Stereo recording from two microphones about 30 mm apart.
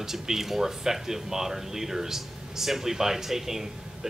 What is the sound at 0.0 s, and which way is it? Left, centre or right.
Speech, centre.